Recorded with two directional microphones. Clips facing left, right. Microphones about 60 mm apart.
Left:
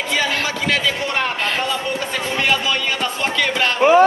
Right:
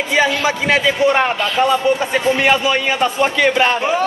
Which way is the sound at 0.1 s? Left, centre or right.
Right.